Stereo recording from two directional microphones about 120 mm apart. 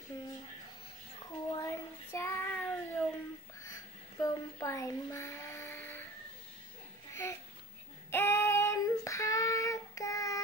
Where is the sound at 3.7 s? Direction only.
30° left (ahead or behind).